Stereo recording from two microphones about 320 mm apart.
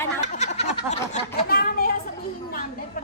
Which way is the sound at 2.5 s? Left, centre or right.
Left.